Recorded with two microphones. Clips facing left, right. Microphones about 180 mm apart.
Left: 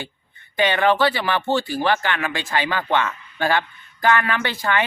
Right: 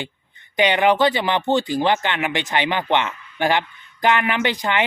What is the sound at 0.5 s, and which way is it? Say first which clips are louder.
Speech: right 1 dB; 15° right (ahead or behind).